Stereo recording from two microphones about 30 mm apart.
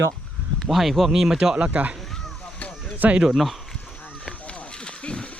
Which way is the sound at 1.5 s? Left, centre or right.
Right.